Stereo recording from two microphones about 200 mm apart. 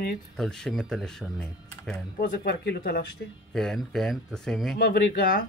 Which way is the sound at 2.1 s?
50° left (ahead or behind).